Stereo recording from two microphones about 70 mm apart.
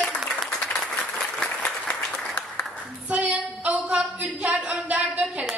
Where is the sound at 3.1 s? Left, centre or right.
Centre.